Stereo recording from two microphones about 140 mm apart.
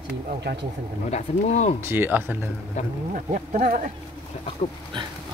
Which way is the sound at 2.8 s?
55° left (ahead or behind).